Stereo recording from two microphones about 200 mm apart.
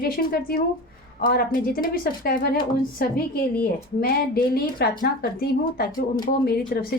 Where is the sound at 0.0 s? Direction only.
45° left (ahead or behind).